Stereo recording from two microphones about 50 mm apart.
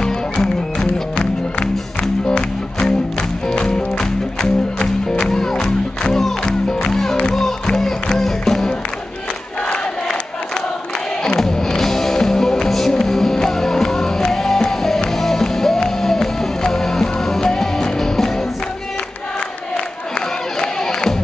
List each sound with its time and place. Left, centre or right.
0.0 s music: centre
11.3 s music: centre
20.5 s crowd: centre